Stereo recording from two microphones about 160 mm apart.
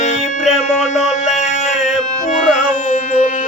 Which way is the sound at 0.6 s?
45° left (ahead or behind).